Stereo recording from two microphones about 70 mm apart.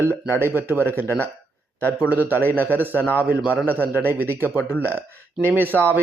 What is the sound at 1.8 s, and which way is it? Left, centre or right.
A man's voice, left.